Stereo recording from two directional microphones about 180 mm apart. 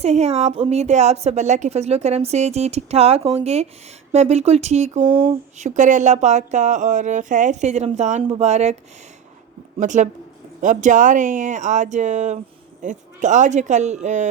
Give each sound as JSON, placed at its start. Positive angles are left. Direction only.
{"t": 0.0, "sound": "a woman's voice", "side_deg": -35}
{"t": 5.5, "sound": "a woman's voice", "side_deg": -45}
{"t": 9.8, "sound": "speech", "side_deg": -45}